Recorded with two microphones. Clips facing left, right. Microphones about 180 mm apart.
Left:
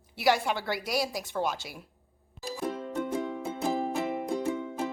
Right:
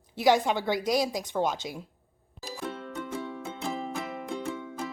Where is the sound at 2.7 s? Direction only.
15° left (ahead or behind).